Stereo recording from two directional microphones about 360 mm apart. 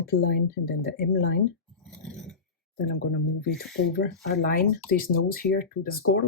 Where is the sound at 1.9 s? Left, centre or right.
Centre.